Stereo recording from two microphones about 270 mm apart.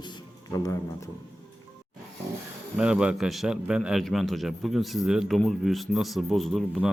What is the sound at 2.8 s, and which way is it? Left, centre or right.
A man's voice, centre.